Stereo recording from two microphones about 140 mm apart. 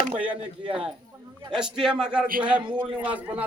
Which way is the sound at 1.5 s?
5° right (ahead or behind).